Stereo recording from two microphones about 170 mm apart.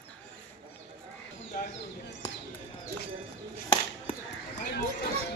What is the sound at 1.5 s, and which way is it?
Bird, 55° left (ahead or behind).